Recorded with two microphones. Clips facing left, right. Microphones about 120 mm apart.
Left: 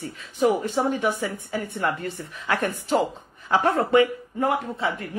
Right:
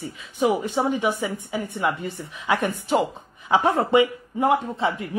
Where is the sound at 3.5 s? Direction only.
15° right (ahead or behind).